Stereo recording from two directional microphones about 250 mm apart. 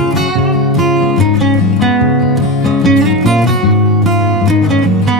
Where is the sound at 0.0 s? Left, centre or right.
Centre.